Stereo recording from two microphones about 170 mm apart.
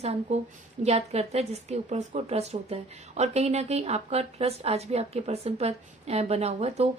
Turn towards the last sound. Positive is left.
turn(degrees=-40)  # may be behind; listen again after turning